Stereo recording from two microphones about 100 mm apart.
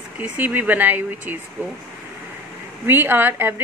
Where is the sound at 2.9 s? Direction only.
20° right (ahead or behind).